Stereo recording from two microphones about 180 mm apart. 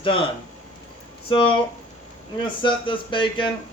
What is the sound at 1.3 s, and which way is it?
Speech, 30° left (ahead or behind).